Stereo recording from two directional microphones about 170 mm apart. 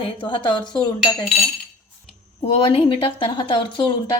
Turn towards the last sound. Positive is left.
turn(degrees=30)  # may be behind; listen again after turning